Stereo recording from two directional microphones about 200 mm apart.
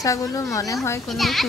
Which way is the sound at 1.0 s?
Centre (ahead or behind).